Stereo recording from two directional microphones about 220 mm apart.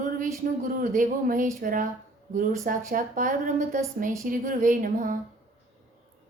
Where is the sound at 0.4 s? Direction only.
40° right (ahead or behind).